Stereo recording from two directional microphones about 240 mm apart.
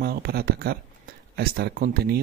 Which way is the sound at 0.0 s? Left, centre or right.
Right.